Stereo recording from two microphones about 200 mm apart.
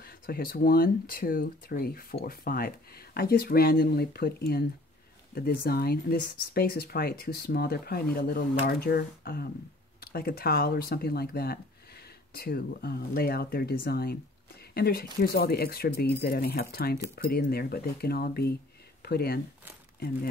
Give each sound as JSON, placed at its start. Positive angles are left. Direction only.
{"t": 0.0, "sound": "speech", "side_deg": 50}